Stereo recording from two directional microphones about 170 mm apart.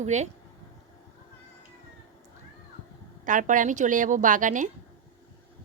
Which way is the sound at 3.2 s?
50° right (ahead or behind).